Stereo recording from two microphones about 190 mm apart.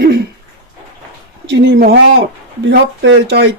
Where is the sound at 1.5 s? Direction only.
65° right (ahead or behind).